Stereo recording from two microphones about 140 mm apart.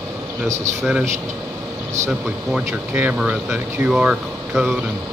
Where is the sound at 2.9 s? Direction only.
10° right (ahead or behind).